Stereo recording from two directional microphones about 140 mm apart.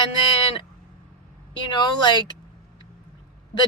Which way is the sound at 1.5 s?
35° left (ahead or behind).